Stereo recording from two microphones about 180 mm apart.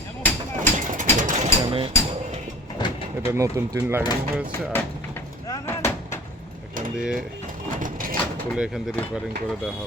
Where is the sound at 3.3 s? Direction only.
15° right (ahead or behind).